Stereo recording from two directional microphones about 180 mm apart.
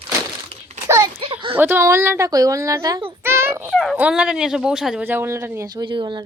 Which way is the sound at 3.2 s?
15° right (ahead or behind).